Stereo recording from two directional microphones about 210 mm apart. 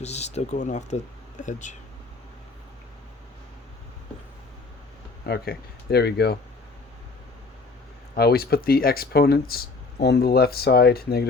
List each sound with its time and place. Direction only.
0.0 s speech: 30° left (ahead or behind)
5.2 s speech: 50° left (ahead or behind)
8.1 s speech: 50° left (ahead or behind)